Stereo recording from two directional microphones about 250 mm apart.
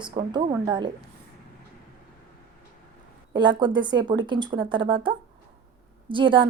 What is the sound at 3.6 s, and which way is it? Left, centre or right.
Speech, centre.